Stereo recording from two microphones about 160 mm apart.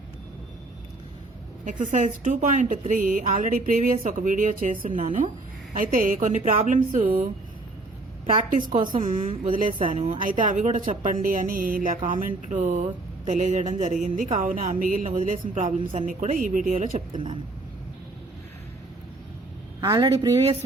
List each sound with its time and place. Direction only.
1.6 s speech: 50° right (ahead or behind)
8.7 s speech: 55° right (ahead or behind)
19.8 s a man's voice: 25° right (ahead or behind)